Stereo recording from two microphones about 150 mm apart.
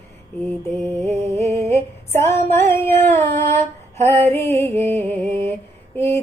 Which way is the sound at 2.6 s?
15° left (ahead or behind).